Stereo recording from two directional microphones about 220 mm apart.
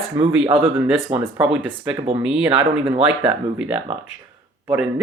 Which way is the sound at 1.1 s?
25° right (ahead or behind).